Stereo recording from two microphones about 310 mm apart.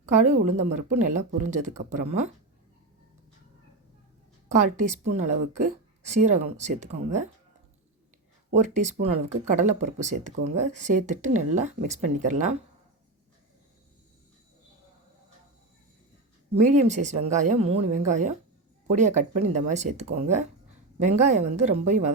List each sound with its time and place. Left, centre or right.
0.1 s a woman's voice: right
4.8 s a woman's voice: right
8.4 s a woman's voice: right
16.6 s a woman's voice: right